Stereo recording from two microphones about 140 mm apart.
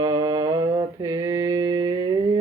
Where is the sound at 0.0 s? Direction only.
30° right (ahead or behind).